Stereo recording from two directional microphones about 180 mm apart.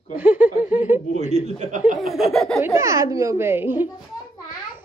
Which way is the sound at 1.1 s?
40° right (ahead or behind).